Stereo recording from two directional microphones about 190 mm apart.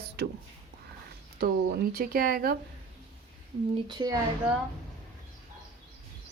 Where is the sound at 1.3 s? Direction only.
55° right (ahead or behind).